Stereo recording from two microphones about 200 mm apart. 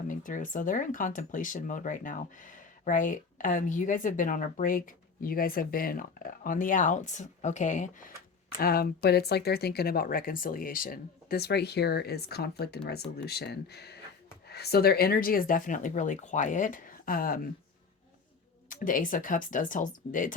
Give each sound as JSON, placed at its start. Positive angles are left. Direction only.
{"t": 0.1, "sound": "speech", "side_deg": 40}
{"t": 8.5, "sound": "speech", "side_deg": 50}
{"t": 18.7, "sound": "speech", "side_deg": 40}